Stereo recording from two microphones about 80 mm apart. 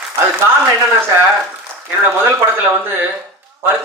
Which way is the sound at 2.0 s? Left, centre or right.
Right.